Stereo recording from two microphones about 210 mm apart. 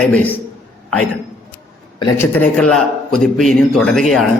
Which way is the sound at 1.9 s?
20° left (ahead or behind).